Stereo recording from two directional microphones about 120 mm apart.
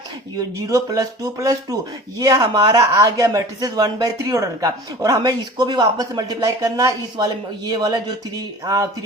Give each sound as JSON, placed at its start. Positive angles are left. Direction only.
{"t": 0.3, "sound": "speech", "side_deg": -30}